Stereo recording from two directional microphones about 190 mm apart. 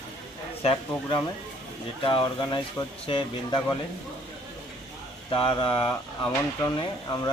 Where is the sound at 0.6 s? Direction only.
30° left (ahead or behind).